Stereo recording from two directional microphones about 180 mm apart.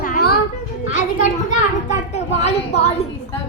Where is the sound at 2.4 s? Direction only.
35° left (ahead or behind).